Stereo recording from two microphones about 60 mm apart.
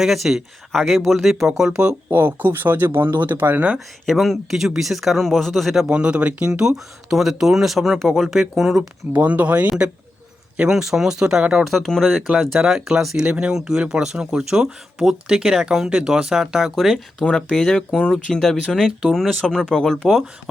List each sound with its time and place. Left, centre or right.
0.0 s speech: centre
1.8 s speech: right
2.1 s speech: right
4.0 s speech: centre
5.9 s speech: centre
9.1 s speech: right
10.7 s speech: centre
11.9 s speech: centre
12.3 s speech: centre
13.2 s speech: centre